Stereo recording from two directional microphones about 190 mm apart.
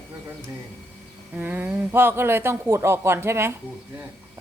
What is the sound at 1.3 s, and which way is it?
A man's voice, 10° right (ahead or behind).